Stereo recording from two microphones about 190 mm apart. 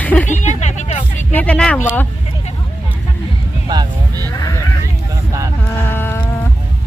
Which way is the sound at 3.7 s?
20° right (ahead or behind).